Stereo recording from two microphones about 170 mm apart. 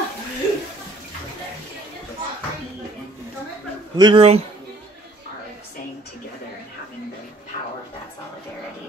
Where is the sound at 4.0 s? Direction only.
30° right (ahead or behind).